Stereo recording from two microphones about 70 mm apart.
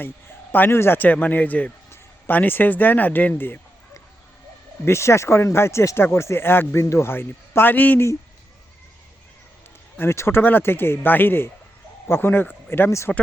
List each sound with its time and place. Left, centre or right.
0.5 s a man's voice: left
4.9 s a man's voice: left
10.0 s a man's voice: left
13.1 s speech: centre